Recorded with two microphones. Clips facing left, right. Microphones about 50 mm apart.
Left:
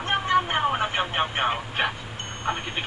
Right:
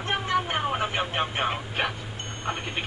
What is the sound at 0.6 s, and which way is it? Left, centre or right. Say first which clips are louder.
Speech: left 3 dB; left.